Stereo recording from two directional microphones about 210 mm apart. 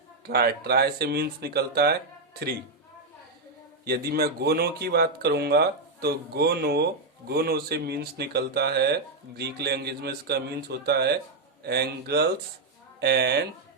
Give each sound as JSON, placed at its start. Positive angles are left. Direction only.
{"t": 0.3, "sound": "speech", "side_deg": -50}
{"t": 3.8, "sound": "speech", "side_deg": -45}